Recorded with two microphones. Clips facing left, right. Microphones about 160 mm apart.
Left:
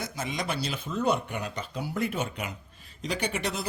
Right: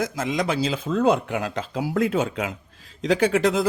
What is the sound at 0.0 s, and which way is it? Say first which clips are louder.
Speech: right 9 dB; 90° right.